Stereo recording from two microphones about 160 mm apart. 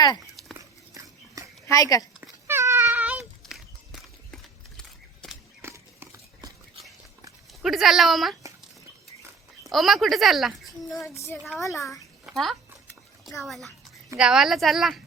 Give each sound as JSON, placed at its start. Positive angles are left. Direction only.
{"t": 0.4, "sound": "dog", "side_deg": 0}
{"t": 1.0, "sound": "horse", "side_deg": -20}
{"t": 1.6, "sound": "speech", "side_deg": 20}
{"t": 2.5, "sound": "a sound", "side_deg": -15}
{"t": 5.6, "sound": "a sound", "side_deg": -15}
{"t": 7.6, "sound": "speech", "side_deg": 0}
{"t": 9.7, "sound": "a child's voice", "side_deg": 0}